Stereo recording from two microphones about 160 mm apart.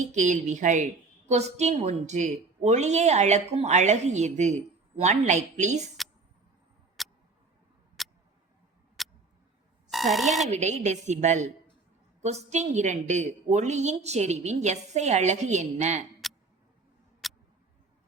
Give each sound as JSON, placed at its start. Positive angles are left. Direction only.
{"t": 0.0, "sound": "a woman's voice", "side_deg": -50}
{"t": 7.0, "sound": "tick", "side_deg": 0}
{"t": 8.0, "sound": "a sound", "side_deg": 0}
{"t": 9.0, "sound": "tick-tock", "side_deg": 0}
{"t": 9.9, "sound": "speech", "side_deg": 0}
{"t": 10.5, "sound": "a woman's voice", "side_deg": -45}
{"t": 17.2, "sound": "tick-tock", "side_deg": 0}